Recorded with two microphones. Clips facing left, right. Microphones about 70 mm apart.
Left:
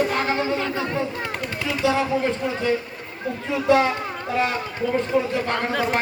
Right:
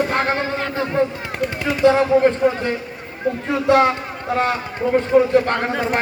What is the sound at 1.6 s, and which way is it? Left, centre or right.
Speech, right.